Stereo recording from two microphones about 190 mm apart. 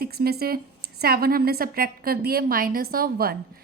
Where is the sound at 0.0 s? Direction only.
55° right (ahead or behind).